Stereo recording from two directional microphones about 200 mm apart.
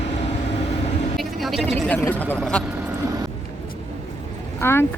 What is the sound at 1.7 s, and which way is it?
Speech, 10° left (ahead or behind).